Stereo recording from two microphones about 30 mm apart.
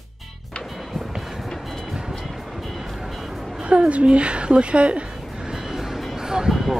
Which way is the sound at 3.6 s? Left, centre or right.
Right.